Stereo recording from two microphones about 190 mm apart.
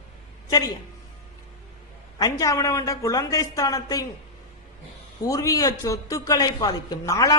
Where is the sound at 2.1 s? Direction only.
20° left (ahead or behind).